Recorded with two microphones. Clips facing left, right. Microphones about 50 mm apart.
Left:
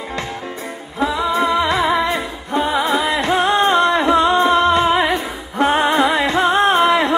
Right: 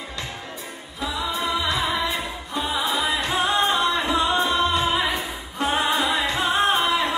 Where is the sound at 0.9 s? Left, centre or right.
Left.